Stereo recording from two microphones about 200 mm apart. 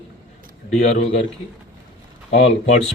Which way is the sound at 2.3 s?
35° left (ahead or behind).